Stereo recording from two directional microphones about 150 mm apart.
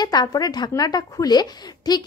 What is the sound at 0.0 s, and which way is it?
A woman's voice, 30° left (ahead or behind).